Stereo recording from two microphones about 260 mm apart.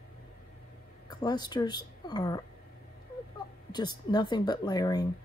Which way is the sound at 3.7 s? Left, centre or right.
Centre.